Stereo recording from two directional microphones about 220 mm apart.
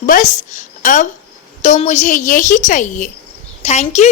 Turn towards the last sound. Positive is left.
turn(degrees=30)  # may be behind; listen again after turning